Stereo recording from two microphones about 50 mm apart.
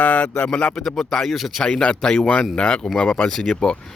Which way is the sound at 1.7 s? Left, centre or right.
Centre.